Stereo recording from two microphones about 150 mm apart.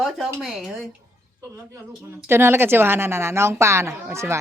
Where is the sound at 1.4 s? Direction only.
20° right (ahead or behind).